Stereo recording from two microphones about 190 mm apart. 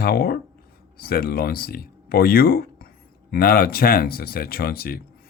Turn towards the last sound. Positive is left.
turn(degrees=50)  # may be behind; listen again after turning